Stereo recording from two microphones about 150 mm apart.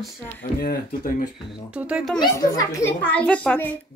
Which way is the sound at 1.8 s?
10° right (ahead or behind).